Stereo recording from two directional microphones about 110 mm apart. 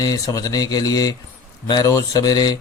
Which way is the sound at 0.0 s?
35° left (ahead or behind).